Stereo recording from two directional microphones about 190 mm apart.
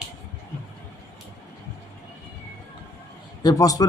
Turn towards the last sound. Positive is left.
turn(degrees=20)  # may be behind; listen again after turning